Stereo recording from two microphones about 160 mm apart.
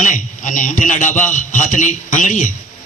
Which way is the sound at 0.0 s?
55° left (ahead or behind).